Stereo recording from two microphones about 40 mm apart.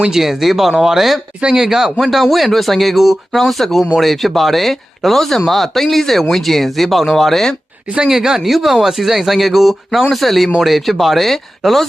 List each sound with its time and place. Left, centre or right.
0.0 s speech: centre
1.4 s speech: centre
8.0 s speech: centre
8.4 s speech: centre